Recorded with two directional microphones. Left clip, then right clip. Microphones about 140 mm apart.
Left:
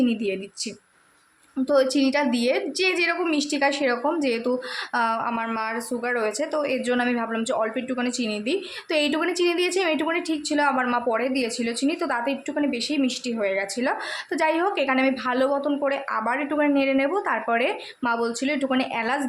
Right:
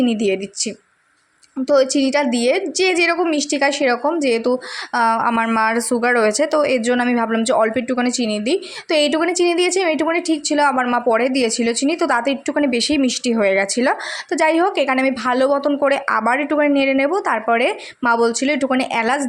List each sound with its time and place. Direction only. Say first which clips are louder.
0.0 s a woman's voice: right 7 dB; 35° right (ahead or behind)
4.9 s speech: right 8 dB; 40° right (ahead or behind)
5.5 s speech: right 10 dB; 55° right (ahead or behind); by 19.3 s 35° right (ahead or behind)